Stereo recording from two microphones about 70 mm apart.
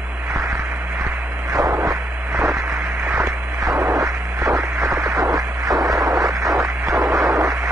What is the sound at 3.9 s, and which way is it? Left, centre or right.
Music, right.